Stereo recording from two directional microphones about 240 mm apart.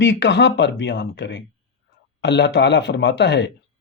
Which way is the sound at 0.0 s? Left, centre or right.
Left.